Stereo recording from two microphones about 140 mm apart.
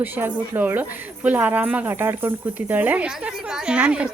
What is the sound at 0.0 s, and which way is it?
Speech, 15° right (ahead or behind).